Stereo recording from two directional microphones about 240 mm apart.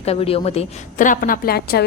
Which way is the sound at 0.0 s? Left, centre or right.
Left.